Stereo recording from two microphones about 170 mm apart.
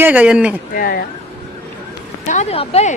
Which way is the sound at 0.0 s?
10° right (ahead or behind).